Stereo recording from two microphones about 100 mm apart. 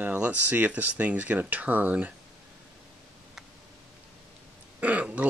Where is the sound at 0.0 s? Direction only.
15° right (ahead or behind).